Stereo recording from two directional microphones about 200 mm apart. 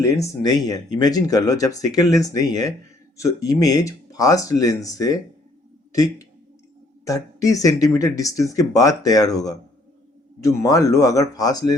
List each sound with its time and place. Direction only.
0.0 s speech: 15° left (ahead or behind)